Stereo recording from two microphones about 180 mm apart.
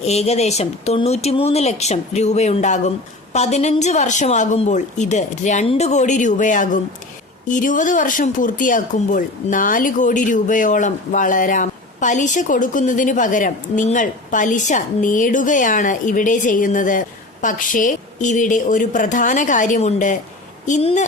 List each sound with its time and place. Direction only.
0.0 s a woman's voice: 35° left (ahead or behind)